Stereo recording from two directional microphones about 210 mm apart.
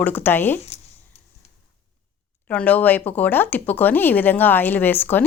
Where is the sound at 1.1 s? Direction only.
30° left (ahead or behind).